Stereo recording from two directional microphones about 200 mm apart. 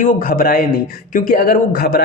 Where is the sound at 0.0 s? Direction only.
45° left (ahead or behind).